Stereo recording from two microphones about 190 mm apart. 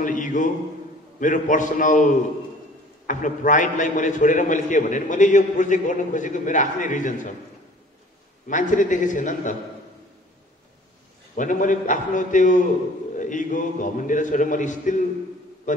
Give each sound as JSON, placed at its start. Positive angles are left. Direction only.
{"t": 0.0, "sound": "a man's voice", "side_deg": 45}
{"t": 3.1, "sound": "a man's voice", "side_deg": 40}
{"t": 8.5, "sound": "a man's voice", "side_deg": 40}
{"t": 11.3, "sound": "a man's voice", "side_deg": 45}